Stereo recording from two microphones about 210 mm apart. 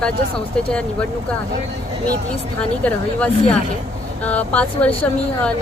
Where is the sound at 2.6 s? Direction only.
5° left (ahead or behind).